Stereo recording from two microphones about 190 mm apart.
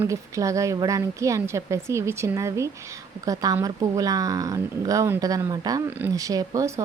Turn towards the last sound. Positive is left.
turn(degrees=-15)  # may be behind; listen again after turning